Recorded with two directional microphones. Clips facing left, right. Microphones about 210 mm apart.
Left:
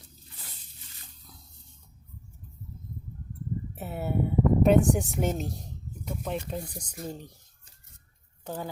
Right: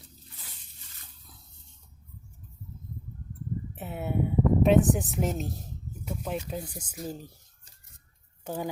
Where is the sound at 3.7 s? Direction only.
Centre (ahead or behind).